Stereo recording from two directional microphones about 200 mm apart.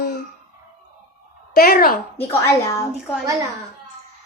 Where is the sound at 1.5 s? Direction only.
50° left (ahead or behind).